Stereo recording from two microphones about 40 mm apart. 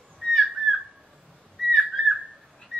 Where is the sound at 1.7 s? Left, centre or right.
Centre.